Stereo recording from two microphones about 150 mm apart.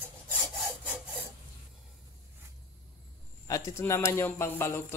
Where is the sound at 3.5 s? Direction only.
20° left (ahead or behind).